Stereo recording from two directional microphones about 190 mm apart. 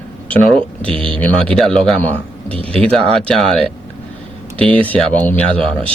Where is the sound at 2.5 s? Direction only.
30° right (ahead or behind).